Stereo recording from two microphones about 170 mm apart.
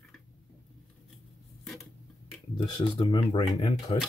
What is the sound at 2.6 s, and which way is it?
Speech, 25° left (ahead or behind).